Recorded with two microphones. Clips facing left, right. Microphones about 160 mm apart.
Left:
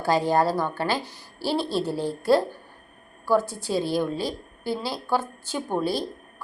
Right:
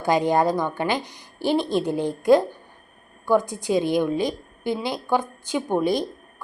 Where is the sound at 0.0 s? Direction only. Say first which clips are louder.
Right 2 dB; 15° right (ahead or behind).